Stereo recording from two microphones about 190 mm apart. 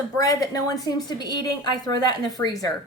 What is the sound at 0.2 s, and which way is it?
A woman's voice, 20° left (ahead or behind).